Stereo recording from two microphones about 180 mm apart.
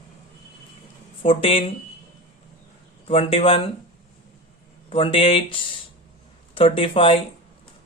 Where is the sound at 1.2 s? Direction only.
30° left (ahead or behind).